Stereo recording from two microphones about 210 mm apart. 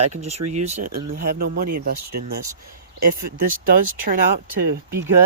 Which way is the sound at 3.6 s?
40° right (ahead or behind).